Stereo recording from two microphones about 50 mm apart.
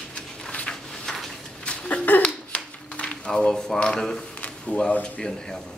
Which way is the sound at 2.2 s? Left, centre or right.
Left.